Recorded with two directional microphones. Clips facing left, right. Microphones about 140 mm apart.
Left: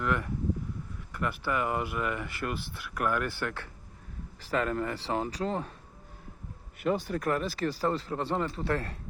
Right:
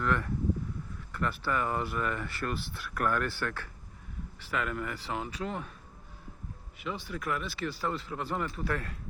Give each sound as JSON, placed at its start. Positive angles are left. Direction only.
{"t": 0.0, "sound": "speech", "side_deg": 15}
{"t": 4.4, "sound": "speech", "side_deg": 35}
{"t": 6.7, "sound": "speech", "side_deg": 45}